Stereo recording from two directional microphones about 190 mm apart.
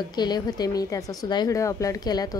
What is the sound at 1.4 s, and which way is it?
Speech, 15° left (ahead or behind).